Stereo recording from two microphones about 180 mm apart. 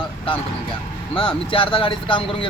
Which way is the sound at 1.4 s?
30° left (ahead or behind).